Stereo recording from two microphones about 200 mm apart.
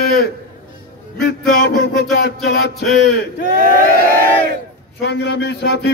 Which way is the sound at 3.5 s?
45° right (ahead or behind).